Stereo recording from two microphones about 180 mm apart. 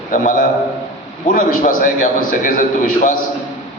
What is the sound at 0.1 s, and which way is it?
A man's voice, 45° left (ahead or behind).